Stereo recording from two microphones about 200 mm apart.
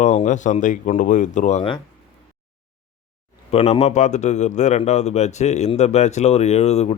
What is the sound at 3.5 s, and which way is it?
Speech, 30° left (ahead or behind).